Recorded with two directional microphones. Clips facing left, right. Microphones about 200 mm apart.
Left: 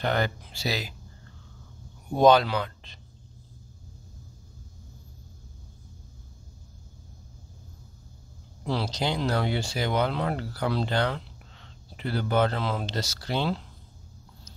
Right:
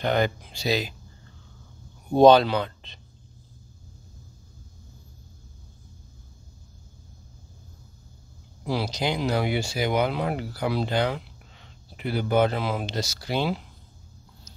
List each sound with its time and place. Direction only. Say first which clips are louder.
0.1 s speech: right 4 dB; 15° right (ahead or behind)
2.1 s speech: right 4 dB; 30° right (ahead or behind)
8.6 s speech: right 2 dB; 10° right (ahead or behind)